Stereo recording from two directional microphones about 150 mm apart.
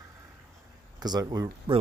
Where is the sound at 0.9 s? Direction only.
25° right (ahead or behind).